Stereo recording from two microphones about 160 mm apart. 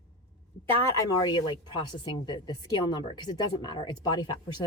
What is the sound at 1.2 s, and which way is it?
Speech, 30° left (ahead or behind).